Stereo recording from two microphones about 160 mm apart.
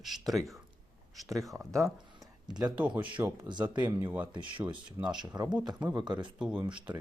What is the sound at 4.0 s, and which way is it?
Speech, 10° right (ahead or behind).